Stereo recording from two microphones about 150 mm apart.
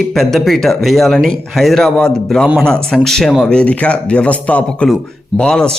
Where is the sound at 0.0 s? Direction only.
Centre (ahead or behind).